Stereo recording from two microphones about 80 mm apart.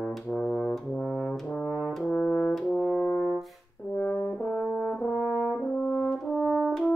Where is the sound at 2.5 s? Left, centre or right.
Centre.